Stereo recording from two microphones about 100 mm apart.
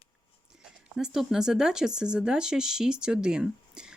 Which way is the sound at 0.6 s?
5° right (ahead or behind).